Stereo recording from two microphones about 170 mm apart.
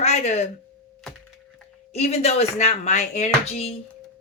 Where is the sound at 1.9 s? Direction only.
40° left (ahead or behind).